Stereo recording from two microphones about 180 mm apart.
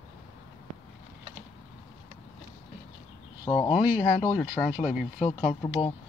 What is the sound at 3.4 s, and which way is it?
Speech, 25° left (ahead or behind).